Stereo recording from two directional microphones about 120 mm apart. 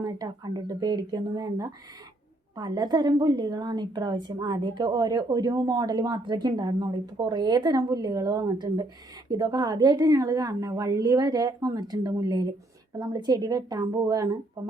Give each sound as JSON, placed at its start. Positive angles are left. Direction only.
{"t": 0.0, "sound": "a woman's voice", "side_deg": -35}